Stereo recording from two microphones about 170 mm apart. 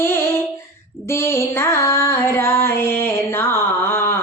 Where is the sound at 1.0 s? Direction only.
15° left (ahead or behind).